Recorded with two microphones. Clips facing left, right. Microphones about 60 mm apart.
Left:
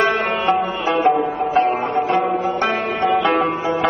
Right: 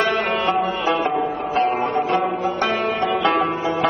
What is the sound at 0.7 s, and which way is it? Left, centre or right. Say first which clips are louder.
Music: left 3 dB; left.